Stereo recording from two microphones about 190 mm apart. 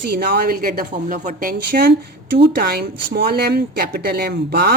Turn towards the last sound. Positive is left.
turn(degrees=-55)  # may be behind; listen again after turning